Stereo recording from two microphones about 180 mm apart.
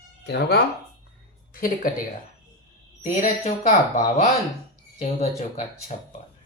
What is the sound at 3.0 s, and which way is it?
Speech, 45° left (ahead or behind).